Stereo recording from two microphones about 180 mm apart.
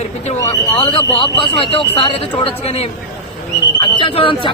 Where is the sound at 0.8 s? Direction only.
25° left (ahead or behind).